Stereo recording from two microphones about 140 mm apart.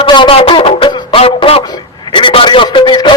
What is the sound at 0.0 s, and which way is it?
Music, 35° left (ahead or behind).